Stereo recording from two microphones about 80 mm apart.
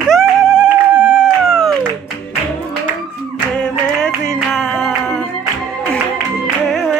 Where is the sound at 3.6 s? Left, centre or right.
Centre.